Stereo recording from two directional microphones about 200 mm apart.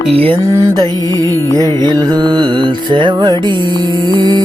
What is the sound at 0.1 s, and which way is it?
Music, 30° right (ahead or behind).